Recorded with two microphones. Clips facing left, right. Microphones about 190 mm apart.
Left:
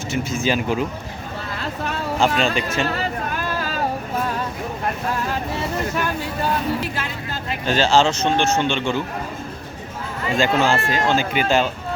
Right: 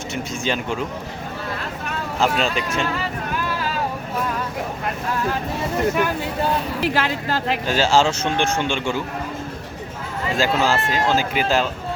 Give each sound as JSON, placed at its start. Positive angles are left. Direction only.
{"t": 0.1, "sound": "speech", "side_deg": 0}
{"t": 2.1, "sound": "speech", "side_deg": 0}
{"t": 6.8, "sound": "speech", "side_deg": -85}
{"t": 7.7, "sound": "speech", "side_deg": -10}
{"t": 10.3, "sound": "speech", "side_deg": 0}